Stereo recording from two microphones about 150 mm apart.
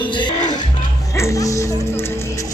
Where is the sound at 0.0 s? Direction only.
30° left (ahead or behind).